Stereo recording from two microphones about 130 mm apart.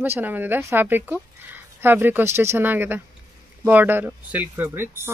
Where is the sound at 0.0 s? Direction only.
15° right (ahead or behind).